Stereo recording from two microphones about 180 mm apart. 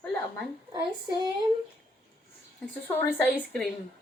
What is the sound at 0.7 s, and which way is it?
Speech, 25° right (ahead or behind).